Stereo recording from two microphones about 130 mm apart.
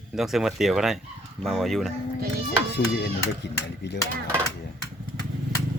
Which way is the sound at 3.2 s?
20° left (ahead or behind).